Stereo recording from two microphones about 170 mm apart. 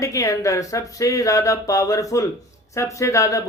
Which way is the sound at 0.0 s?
20° left (ahead or behind).